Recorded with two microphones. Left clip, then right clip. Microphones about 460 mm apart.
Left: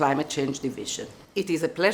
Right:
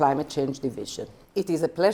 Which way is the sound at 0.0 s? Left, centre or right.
Right.